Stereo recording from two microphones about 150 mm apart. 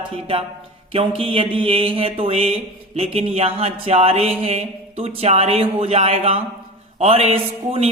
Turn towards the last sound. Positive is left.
turn(degrees=-40)  # may be behind; listen again after turning